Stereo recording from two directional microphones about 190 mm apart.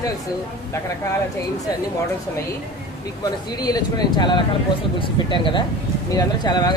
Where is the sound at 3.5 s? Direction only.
20° left (ahead or behind).